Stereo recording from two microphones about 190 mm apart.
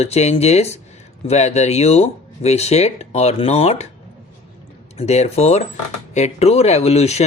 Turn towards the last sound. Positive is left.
turn(degrees=35)  # may be behind; listen again after turning